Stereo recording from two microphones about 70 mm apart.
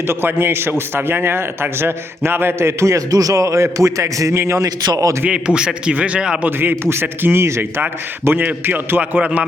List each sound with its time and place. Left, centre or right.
0.1 s a man's voice: right
5.2 s a man's voice: centre
6.4 s a man's voice: right